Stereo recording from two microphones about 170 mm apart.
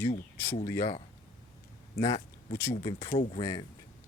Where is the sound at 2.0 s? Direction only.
25° left (ahead or behind).